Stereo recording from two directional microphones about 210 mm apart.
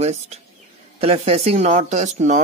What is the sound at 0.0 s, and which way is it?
Speech, 30° right (ahead or behind).